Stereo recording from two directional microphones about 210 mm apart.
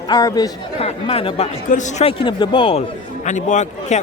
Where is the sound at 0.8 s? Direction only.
30° left (ahead or behind).